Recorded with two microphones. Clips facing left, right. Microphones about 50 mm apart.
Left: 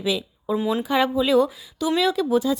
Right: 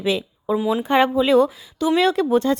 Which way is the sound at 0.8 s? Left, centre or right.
Right.